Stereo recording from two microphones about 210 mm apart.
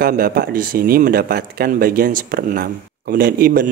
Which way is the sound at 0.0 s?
45° right (ahead or behind).